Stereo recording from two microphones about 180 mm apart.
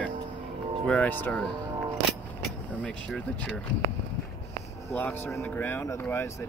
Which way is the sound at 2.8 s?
5° left (ahead or behind).